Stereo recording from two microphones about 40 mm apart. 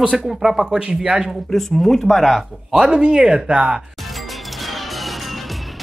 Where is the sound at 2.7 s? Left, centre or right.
Centre.